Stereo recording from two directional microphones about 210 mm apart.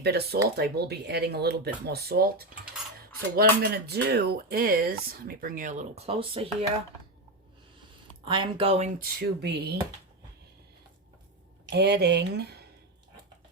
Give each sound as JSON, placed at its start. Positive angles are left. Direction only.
{"t": 0.0, "sound": "speech", "side_deg": -50}
{"t": 8.2, "sound": "speech", "side_deg": -25}
{"t": 9.0, "sound": "speech", "side_deg": -50}
{"t": 11.7, "sound": "speech", "side_deg": -50}